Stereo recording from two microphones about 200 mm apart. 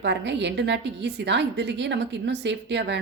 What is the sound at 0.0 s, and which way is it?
Speech, 60° right (ahead or behind).